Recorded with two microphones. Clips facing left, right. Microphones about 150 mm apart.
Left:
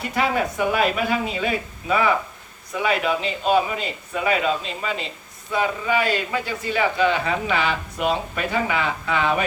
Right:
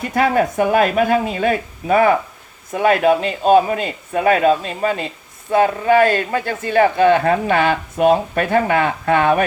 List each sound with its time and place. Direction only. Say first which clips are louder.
0.1 s a man's voice: right 6 dB; 50° right (ahead or behind)